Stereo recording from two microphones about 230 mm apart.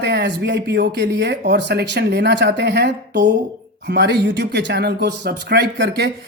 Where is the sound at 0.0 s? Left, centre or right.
Right.